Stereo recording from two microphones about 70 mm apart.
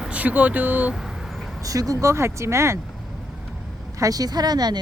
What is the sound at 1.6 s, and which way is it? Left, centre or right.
Speech, right.